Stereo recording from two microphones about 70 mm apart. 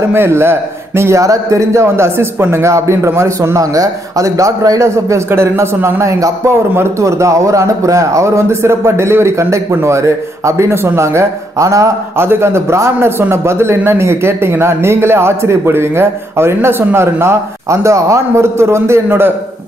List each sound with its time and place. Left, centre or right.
0.1 s speech: right
1.2 s a man's voice: right
6.1 s a man's voice: right
12.2 s speech: right